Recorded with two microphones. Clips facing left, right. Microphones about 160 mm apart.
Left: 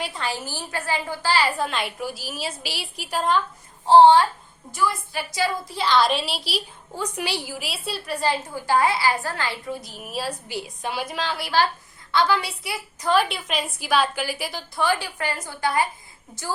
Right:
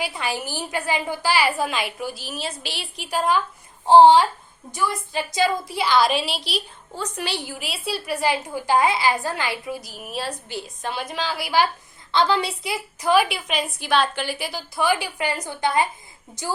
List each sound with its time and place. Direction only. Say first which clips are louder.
0.0 s a woman's voice: right 2 dB; 10° right (ahead or behind)
3.8 s a woman's voice: right 1 dB; 15° right (ahead or behind)
12.1 s a woman's voice: right 1 dB; 25° right (ahead or behind)
13.0 s a woman's voice: right 2 dB; 10° right (ahead or behind)
14.8 s a woman's voice: right 2 dB; 10° right (ahead or behind)